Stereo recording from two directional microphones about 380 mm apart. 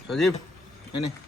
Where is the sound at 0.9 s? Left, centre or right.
Left.